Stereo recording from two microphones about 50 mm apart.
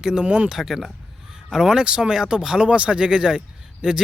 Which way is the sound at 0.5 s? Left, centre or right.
Centre.